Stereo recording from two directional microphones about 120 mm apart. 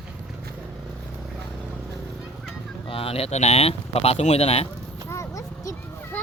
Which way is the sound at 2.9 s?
50° left (ahead or behind).